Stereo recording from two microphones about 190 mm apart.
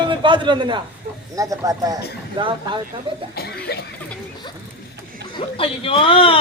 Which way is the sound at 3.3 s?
55° left (ahead or behind).